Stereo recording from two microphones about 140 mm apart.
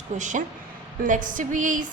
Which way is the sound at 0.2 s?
60° right (ahead or behind).